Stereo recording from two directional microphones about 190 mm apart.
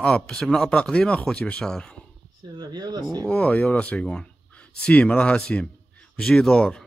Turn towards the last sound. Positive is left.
turn(degrees=5)  # may be behind; listen again after turning